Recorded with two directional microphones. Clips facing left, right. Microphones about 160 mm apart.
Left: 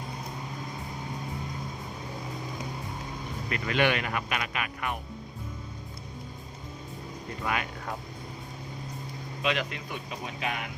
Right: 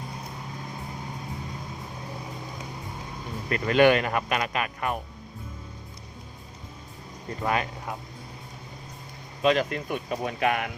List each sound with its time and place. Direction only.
3.5 s speech: 40° right (ahead or behind)
7.4 s speech: 35° right (ahead or behind)
9.4 s speech: 40° right (ahead or behind); by 10.7 s 60° right (ahead or behind)